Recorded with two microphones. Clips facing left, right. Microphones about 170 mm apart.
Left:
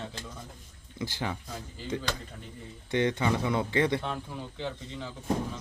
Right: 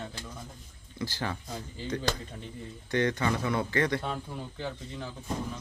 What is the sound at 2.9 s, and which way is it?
Speech, 20° left (ahead or behind).